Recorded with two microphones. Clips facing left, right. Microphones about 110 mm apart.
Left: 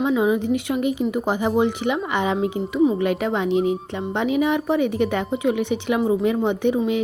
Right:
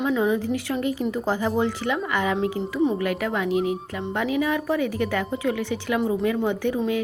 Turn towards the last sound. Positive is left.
turn(degrees=20)  # may be behind; listen again after turning